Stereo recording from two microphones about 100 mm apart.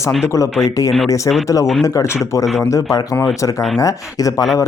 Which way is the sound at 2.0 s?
30° left (ahead or behind).